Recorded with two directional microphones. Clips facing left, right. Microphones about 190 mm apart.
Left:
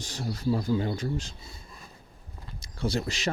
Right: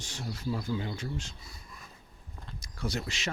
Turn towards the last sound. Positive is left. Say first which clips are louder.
# left 5 dB
turn(degrees=35)  # may be behind; listen again after turning